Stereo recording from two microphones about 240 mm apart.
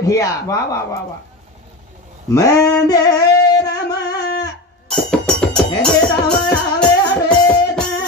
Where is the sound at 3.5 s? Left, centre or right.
Centre.